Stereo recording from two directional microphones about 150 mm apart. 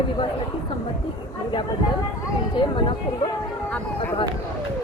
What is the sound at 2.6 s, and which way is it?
Speech, 35° left (ahead or behind).